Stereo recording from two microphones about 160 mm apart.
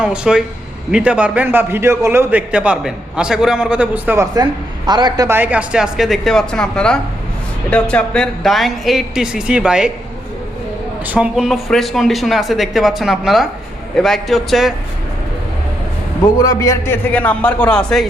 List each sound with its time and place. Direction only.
0.0 s a man's voice: 5° right (ahead or behind)
4.9 s a man's voice: 25° right (ahead or behind)
5.4 s speech: 10° right (ahead or behind)
11.0 s speech: 10° right (ahead or behind)
16.4 s a man's voice: 20° left (ahead or behind); by 18.1 s 5° left (ahead or behind)